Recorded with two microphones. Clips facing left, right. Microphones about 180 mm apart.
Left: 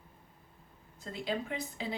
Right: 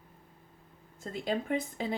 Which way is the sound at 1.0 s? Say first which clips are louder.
Right 3 dB; 50° right (ahead or behind).